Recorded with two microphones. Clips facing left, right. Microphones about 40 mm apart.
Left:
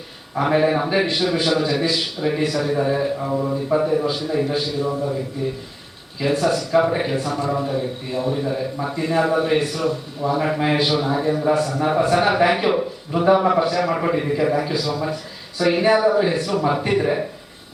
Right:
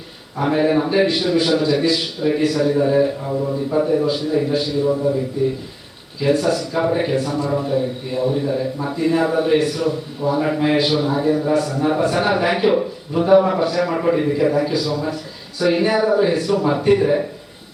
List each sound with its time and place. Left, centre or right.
0.4 s a man's voice: centre
3.3 s speech: left
3.8 s a man's voice: centre